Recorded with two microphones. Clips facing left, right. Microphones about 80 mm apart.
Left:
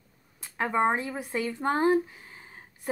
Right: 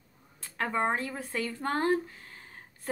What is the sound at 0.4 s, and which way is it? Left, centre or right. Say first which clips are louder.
Speech: left 4 dB; centre.